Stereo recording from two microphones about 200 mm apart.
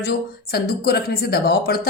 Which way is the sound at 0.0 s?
55° left (ahead or behind).